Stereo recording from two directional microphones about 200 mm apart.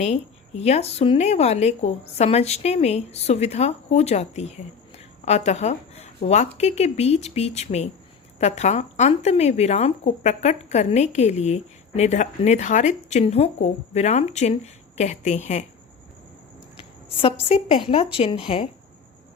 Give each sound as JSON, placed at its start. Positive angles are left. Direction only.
{"t": 0.0, "sound": "speech", "side_deg": 30}
{"t": 17.2, "sound": "speech", "side_deg": 30}